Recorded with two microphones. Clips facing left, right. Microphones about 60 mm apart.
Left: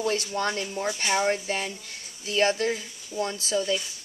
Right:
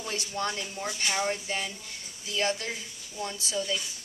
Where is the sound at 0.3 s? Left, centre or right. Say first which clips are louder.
Left 4 dB; left.